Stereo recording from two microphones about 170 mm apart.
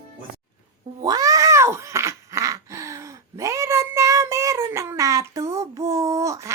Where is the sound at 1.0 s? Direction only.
20° right (ahead or behind).